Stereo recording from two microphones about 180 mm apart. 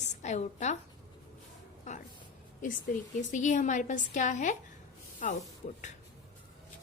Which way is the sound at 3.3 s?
45° left (ahead or behind).